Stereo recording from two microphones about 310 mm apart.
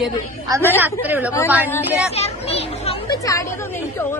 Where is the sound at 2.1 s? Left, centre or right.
Centre.